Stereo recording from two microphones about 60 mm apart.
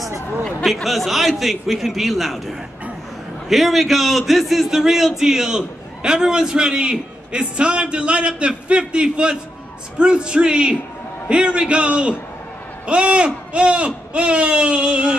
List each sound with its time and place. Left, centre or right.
0.6 s speech: centre
0.8 s a man's voice: centre